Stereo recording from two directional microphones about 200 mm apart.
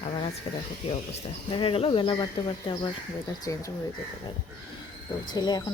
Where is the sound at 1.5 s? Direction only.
25° left (ahead or behind).